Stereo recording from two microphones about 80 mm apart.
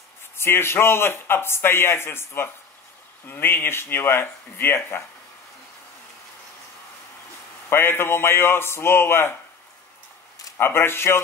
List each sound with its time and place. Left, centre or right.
0.4 s speech: left
7.7 s speech: left
10.6 s speech: left